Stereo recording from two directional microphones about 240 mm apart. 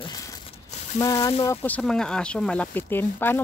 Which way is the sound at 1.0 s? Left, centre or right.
Centre.